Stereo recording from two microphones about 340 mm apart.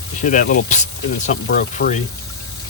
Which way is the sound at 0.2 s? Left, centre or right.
Left.